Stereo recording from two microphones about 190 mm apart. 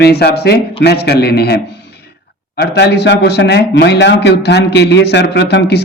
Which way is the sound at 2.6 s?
60° left (ahead or behind).